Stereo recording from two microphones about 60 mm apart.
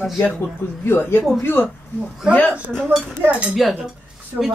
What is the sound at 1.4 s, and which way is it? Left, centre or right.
Speech, left.